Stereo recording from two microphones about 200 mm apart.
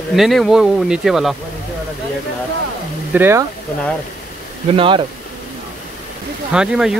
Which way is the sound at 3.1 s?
10° right (ahead or behind).